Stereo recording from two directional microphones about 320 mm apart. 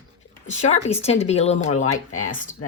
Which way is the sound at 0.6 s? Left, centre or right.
Left.